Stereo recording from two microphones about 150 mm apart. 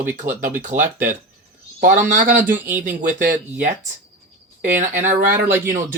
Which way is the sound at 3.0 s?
60° right (ahead or behind).